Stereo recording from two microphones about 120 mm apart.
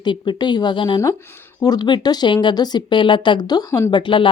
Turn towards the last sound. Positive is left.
turn(degrees=45)  # may be behind; listen again after turning